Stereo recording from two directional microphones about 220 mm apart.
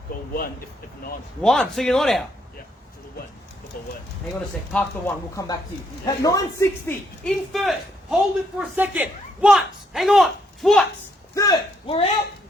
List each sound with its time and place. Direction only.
0.1 s speech: 45° left (ahead or behind)
1.4 s speech: 5° left (ahead or behind)
4.7 s speech: 10° left (ahead or behind)
7.3 s speech: centre (ahead or behind)
11.3 s speech: 15° left (ahead or behind)